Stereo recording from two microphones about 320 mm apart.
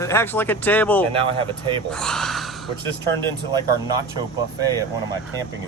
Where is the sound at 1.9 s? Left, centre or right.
Centre.